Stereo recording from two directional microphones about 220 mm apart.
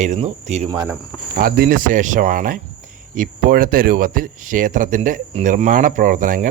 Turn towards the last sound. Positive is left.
turn(degrees=-35)  # may be behind; listen again after turning